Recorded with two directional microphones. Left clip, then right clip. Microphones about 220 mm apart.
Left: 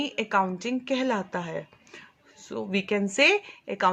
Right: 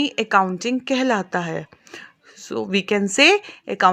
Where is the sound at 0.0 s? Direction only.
40° right (ahead or behind).